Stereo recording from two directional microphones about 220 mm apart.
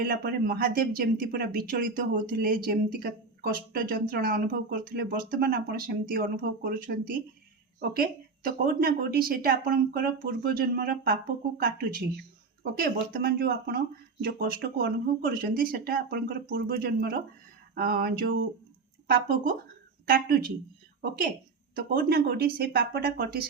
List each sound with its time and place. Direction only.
0.0 s speech: 45° right (ahead or behind)
20.1 s speech: 45° right (ahead or behind)
21.8 s speech: 45° right (ahead or behind)